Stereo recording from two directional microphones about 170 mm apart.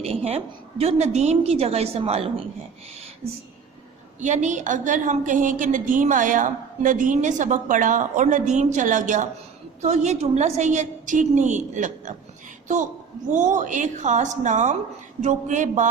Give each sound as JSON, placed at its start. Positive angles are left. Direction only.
{"t": 0.0, "sound": "a woman's voice", "side_deg": -35}
{"t": 4.2, "sound": "a woman's voice", "side_deg": -45}
{"t": 13.3, "sound": "a woman's voice", "side_deg": -45}